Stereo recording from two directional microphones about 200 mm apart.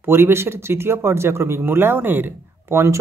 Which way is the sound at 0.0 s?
10° right (ahead or behind).